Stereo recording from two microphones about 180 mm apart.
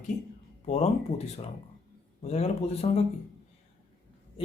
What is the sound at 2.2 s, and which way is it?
Speech, 35° left (ahead or behind).